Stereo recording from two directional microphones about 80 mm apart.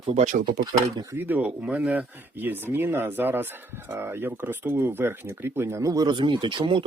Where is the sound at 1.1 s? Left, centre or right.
Right.